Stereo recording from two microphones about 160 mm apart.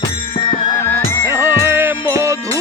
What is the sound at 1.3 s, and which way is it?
Music, 15° right (ahead or behind).